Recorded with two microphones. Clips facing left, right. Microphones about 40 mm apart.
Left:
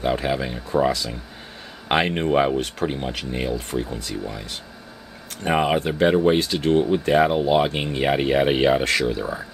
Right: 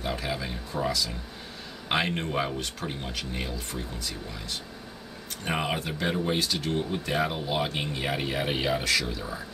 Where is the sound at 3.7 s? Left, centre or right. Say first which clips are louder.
Left 8 dB; left.